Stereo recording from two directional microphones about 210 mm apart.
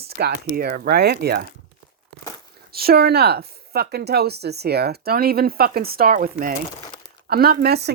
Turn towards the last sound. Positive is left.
turn(degrees=-50)  # may be behind; listen again after turning